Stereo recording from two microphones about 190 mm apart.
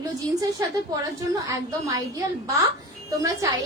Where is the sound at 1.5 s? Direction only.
20° right (ahead or behind).